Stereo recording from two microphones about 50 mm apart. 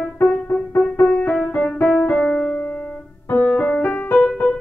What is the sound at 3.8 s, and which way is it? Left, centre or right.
Music, left.